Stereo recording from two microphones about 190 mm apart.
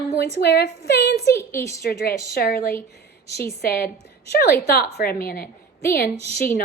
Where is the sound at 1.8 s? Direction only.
55° left (ahead or behind).